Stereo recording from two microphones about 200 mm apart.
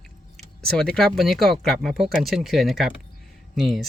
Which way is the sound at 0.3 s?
5° left (ahead or behind).